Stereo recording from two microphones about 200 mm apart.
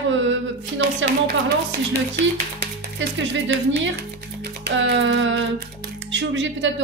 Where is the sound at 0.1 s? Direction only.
65° right (ahead or behind).